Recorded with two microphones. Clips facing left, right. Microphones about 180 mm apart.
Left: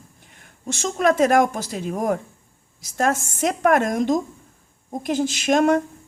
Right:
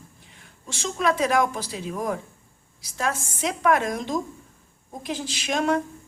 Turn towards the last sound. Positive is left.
turn(degrees=50)  # may be behind; listen again after turning